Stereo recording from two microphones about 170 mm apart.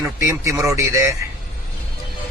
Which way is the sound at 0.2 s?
15° right (ahead or behind).